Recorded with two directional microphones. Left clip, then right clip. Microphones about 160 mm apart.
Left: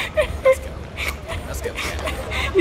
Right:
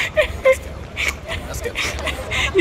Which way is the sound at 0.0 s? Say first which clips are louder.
Right 2 dB; 5° right (ahead or behind).